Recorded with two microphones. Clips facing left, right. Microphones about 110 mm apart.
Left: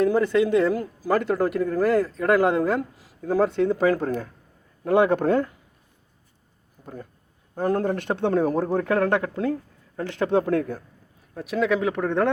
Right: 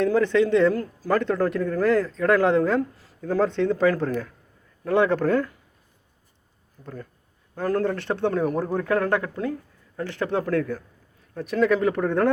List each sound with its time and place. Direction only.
0.0 s speech: 5° left (ahead or behind)
6.8 s speech: 20° left (ahead or behind)
8.3 s speech: 30° left (ahead or behind)
8.9 s speech: 25° left (ahead or behind)
11.3 s speech: centre (ahead or behind)